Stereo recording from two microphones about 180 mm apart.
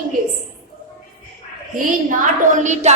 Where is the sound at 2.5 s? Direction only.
40° right (ahead or behind).